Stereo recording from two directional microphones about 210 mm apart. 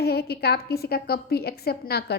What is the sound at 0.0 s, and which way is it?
A woman's voice, 50° left (ahead or behind).